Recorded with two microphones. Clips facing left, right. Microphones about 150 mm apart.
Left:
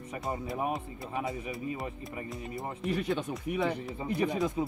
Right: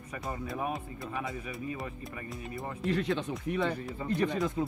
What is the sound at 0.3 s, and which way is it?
Speech, 20° left (ahead or behind).